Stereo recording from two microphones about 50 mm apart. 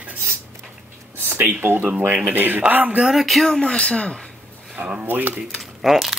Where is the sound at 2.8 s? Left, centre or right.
Right.